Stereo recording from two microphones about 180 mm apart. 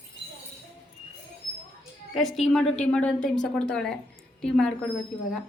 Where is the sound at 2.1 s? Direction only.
Centre (ahead or behind).